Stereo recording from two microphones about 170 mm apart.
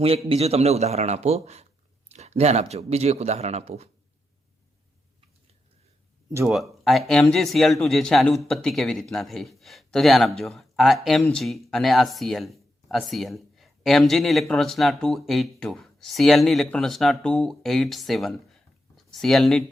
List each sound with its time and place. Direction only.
0.3 s speech: 35° right (ahead or behind)
6.5 s speech: centre (ahead or behind)